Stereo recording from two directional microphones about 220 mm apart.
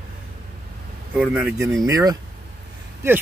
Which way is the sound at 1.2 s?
5° right (ahead or behind).